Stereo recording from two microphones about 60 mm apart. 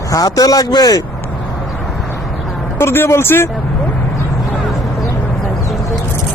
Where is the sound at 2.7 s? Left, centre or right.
Left.